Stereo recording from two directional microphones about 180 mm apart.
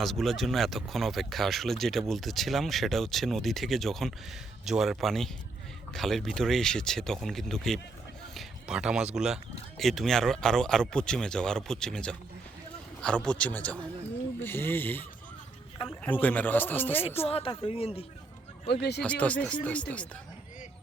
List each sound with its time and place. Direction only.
0.0 s speech: centre (ahead or behind)
8.4 s a sound: 5° right (ahead or behind)
9.1 s a man's voice: 5° right (ahead or behind)
16.0 s a man's voice: 10° left (ahead or behind)
17.2 s speech: 30° left (ahead or behind)
18.7 s speech: 65° left (ahead or behind)
19.0 s a man's voice: 5° left (ahead or behind)